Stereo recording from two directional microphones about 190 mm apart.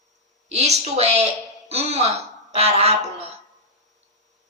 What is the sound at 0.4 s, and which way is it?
A woman's voice, 35° right (ahead or behind).